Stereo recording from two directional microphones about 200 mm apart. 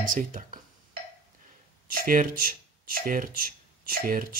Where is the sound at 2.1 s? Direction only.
45° right (ahead or behind).